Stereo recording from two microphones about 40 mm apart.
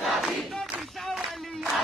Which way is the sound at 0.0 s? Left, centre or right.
Centre.